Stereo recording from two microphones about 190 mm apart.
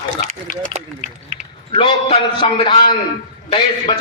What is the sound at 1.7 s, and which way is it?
A man's voice, 25° left (ahead or behind).